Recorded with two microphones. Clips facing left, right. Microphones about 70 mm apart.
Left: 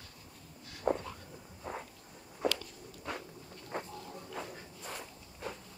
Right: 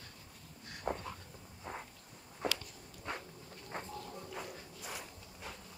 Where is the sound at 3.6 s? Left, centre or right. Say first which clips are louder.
Left 3 dB; centre.